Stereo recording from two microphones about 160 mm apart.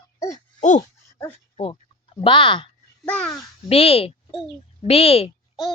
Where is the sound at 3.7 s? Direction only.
35° left (ahead or behind).